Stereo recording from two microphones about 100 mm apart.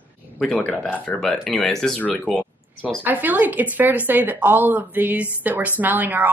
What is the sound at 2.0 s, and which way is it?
Speech, 20° left (ahead or behind).